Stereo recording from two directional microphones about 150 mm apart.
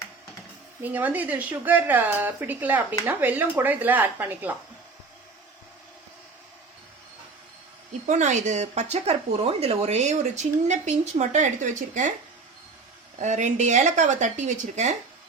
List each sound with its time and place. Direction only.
0.8 s speech: 10° right (ahead or behind)
8.0 s speech: 55° right (ahead or behind)
13.1 s speech: 55° right (ahead or behind)